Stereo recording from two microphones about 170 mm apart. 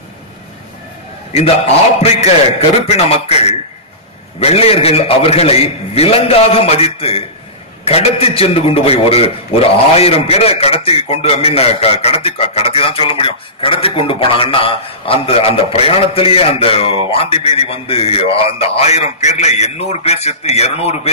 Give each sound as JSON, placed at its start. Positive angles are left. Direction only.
{"t": 2.0, "sound": "a man's voice", "side_deg": 40}